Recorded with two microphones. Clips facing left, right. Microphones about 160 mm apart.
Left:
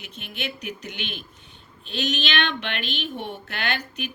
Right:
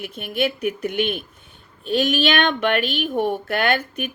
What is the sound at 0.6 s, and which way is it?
Speech, 55° right (ahead or behind).